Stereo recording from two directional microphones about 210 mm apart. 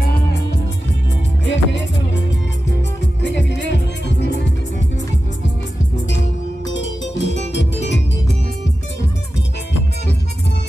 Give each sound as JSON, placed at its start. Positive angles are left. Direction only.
{"t": 1.4, "sound": "music", "side_deg": 60}
{"t": 3.2, "sound": "music", "side_deg": 55}
{"t": 6.7, "sound": "music", "side_deg": 60}